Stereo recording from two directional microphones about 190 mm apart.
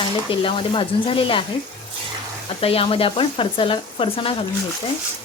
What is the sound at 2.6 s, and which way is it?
Speech, 30° left (ahead or behind).